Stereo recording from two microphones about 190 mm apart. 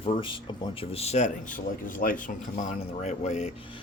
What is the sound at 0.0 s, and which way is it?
Speech, 25° left (ahead or behind).